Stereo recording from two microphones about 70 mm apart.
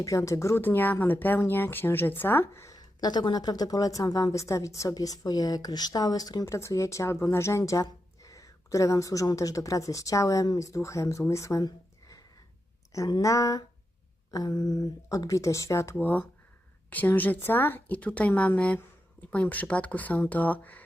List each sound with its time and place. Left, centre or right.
0.0 s a woman's voice: left
0.6 s a woman's voice: left
2.6 s speech: left
6.4 s a woman's voice: left
11.6 s a sound: left
13.2 s a woman's voice: left
14.3 s speech: left
16.0 s a woman's voice: left